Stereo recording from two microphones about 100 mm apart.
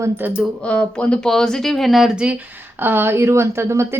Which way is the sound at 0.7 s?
10° left (ahead or behind).